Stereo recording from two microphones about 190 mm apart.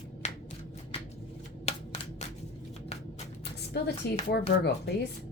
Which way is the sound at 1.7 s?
35° left (ahead or behind).